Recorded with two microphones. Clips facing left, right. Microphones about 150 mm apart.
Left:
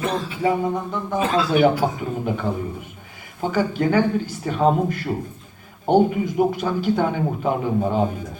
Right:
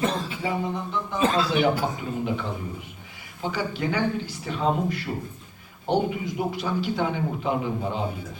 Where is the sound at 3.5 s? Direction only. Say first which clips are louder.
Left 8 dB; 45° left (ahead or behind).